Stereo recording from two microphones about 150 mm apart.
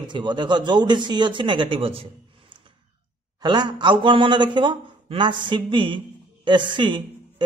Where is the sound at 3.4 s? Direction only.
30° right (ahead or behind).